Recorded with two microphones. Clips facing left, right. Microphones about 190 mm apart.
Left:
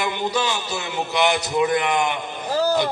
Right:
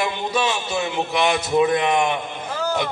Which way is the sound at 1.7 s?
25° right (ahead or behind).